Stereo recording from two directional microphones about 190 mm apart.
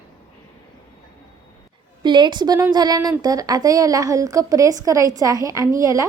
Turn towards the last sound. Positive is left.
turn(degrees=-15)  # may be behind; listen again after turning